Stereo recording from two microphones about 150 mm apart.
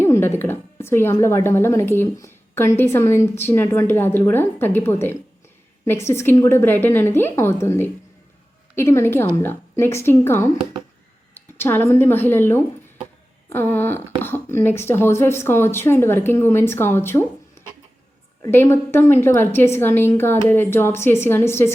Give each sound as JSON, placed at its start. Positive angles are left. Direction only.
{"t": 0.0, "sound": "a sound", "side_deg": 15}
{"t": 1.2, "sound": "a woman's voice", "side_deg": 15}
{"t": 18.4, "sound": "a woman's voice", "side_deg": 15}